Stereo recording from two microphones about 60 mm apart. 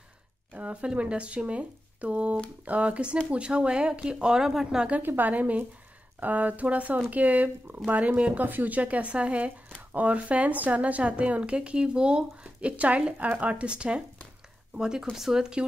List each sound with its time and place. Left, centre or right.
0.6 s speech: centre
5.0 s speech: right; by 15.6 s centre